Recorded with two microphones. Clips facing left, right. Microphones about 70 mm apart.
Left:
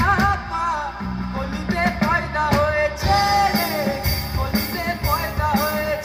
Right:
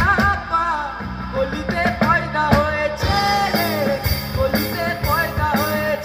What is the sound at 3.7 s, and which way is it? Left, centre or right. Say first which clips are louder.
Music: right 3 dB; right.